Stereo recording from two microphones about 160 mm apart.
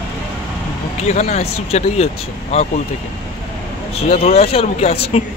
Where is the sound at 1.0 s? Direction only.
45° left (ahead or behind).